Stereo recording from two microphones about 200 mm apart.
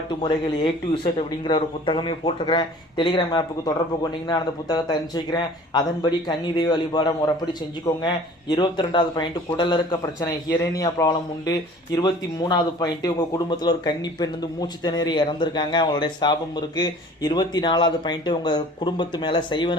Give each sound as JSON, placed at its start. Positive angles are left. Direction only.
{"t": 0.1, "sound": "speech", "side_deg": 25}